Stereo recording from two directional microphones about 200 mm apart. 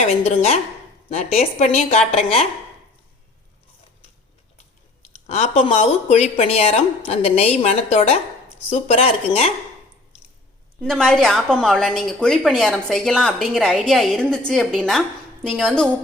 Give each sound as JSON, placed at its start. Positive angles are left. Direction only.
{"t": 0.0, "sound": "a woman's voice", "side_deg": 35}
{"t": 5.0, "sound": "a woman's voice", "side_deg": 35}
{"t": 10.8, "sound": "a woman's voice", "side_deg": 5}